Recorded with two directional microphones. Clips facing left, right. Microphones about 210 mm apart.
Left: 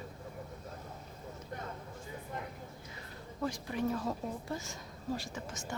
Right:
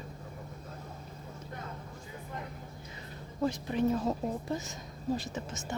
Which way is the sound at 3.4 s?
20° right (ahead or behind).